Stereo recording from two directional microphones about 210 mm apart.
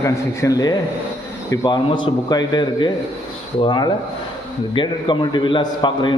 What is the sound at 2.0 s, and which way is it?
A man's voice, 20° left (ahead or behind).